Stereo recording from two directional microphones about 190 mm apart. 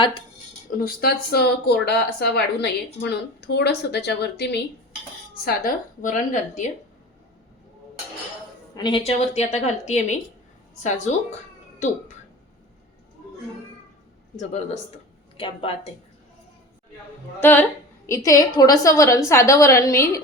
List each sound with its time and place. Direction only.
0.8 s speech: 55° left (ahead or behind)
5.3 s a woman's voice: 45° left (ahead or behind)
8.7 s a woman's voice: 25° left (ahead or behind); by 11.1 s 40° left (ahead or behind)
14.3 s a woman's voice: 35° left (ahead or behind)
17.4 s a woman's voice: 10° left (ahead or behind)